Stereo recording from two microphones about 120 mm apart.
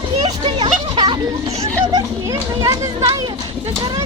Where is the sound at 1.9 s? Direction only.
30° right (ahead or behind).